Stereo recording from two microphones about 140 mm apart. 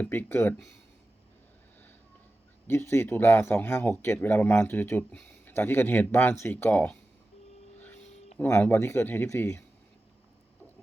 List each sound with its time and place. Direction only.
0.0 s speech: 15° left (ahead or behind)
2.6 s speech: 15° left (ahead or behind)
8.4 s speech: 15° left (ahead or behind)